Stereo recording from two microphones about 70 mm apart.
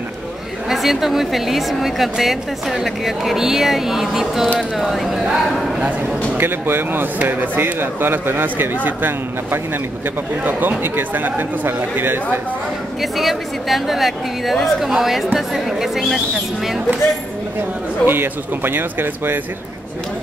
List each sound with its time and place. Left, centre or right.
0.7 s a woman's voice: centre
6.3 s speech: right
13.0 s a woman's voice: centre
18.0 s speech: right